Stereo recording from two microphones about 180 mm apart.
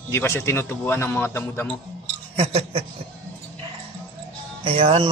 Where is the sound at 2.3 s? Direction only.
35° right (ahead or behind).